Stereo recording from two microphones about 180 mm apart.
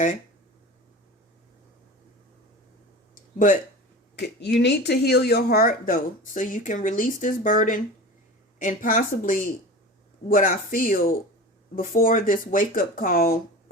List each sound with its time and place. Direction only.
3.3 s speech: 45° left (ahead or behind)
4.1 s speech: 70° left (ahead or behind)